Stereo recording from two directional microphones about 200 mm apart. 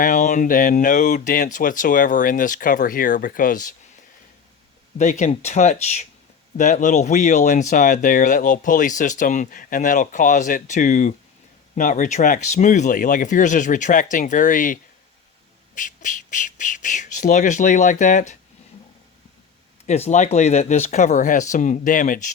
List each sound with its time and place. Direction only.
0.0 s speech: 40° left (ahead or behind)
4.9 s speech: 35° left (ahead or behind)
19.8 s speech: 35° left (ahead or behind)